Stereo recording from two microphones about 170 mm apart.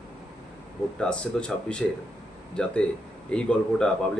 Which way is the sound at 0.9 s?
5° left (ahead or behind).